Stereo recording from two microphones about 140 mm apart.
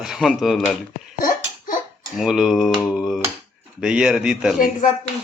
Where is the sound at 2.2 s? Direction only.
Centre (ahead or behind).